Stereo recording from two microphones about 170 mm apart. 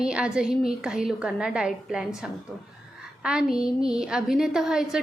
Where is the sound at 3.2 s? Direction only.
5° right (ahead or behind).